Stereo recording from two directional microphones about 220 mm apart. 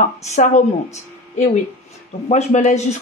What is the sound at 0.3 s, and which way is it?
Speech, 35° left (ahead or behind).